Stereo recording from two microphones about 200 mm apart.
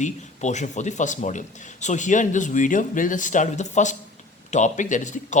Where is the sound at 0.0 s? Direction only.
35° left (ahead or behind).